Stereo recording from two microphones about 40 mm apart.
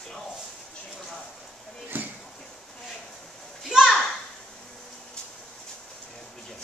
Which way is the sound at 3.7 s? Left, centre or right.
Right.